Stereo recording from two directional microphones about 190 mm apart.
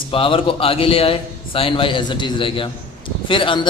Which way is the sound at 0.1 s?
30° left (ahead or behind).